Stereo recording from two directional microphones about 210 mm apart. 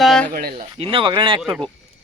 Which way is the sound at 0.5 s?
25° right (ahead or behind).